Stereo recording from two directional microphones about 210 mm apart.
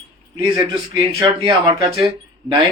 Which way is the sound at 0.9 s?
25° right (ahead or behind).